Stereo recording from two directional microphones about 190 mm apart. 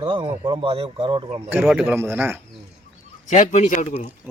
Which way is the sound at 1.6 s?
5° right (ahead or behind).